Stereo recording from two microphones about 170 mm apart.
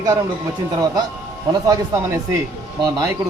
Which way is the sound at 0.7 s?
20° right (ahead or behind).